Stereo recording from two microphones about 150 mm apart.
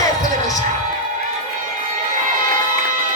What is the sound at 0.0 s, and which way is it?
Music, 25° left (ahead or behind).